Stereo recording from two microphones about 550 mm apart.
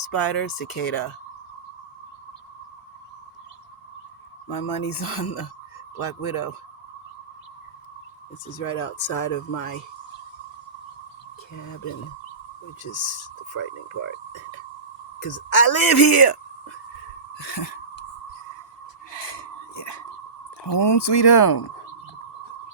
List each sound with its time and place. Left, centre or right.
0.1 s speech: left
4.4 s speech: left
8.4 s speech: left
11.5 s speech: left
12.8 s speech: left
19.1 s a sound: left
20.7 s speech: left